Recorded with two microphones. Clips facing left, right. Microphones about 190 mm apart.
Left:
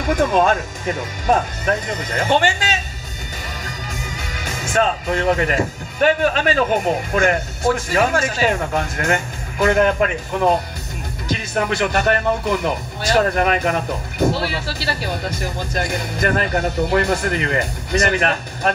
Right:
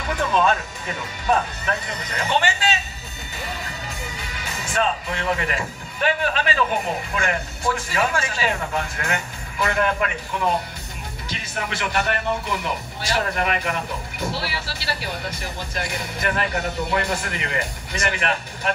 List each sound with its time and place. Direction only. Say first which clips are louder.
0.0 s speech: left 5 dB; 45° left (ahead or behind)
4.2 s speech: left 4 dB; 45° left (ahead or behind)